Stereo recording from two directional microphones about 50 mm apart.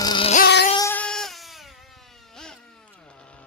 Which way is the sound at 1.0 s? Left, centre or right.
Centre.